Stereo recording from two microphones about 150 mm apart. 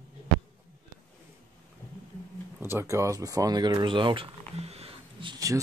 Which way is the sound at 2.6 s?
15° right (ahead or behind).